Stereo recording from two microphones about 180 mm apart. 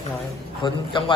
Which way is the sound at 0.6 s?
25° left (ahead or behind).